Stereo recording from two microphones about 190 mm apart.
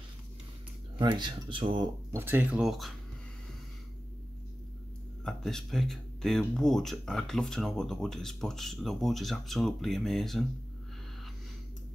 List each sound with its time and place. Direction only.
0.9 s speech: 25° right (ahead or behind)
2.1 s speech: 10° right (ahead or behind)
5.2 s speech: centre (ahead or behind)